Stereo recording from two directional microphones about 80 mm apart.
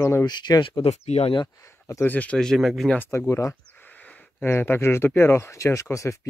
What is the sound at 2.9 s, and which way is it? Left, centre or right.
Speech, left.